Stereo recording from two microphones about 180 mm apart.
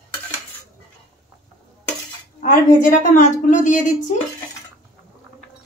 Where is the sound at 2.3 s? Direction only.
45° left (ahead or behind).